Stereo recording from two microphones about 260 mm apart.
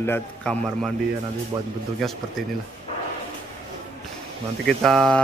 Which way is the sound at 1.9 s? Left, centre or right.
Centre.